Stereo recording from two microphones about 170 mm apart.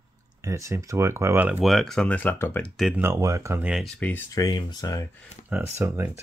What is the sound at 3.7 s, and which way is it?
Speech, 5° left (ahead or behind).